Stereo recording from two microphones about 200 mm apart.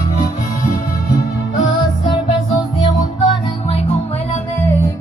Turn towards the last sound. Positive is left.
turn(degrees=25)  # may be behind; listen again after turning